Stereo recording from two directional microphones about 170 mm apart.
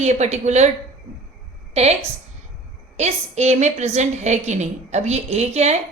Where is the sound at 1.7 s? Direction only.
40° right (ahead or behind).